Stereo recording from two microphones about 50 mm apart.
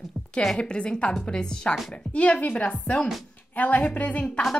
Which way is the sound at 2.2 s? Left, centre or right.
Left.